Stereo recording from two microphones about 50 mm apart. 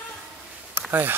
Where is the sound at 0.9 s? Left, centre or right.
Right.